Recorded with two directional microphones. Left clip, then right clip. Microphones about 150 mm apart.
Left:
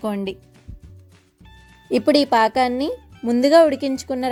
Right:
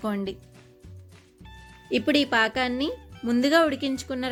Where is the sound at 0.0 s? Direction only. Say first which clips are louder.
Left 5 dB; 40° left (ahead or behind).